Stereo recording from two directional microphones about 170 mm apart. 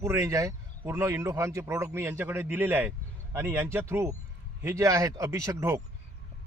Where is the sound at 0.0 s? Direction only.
15° right (ahead or behind).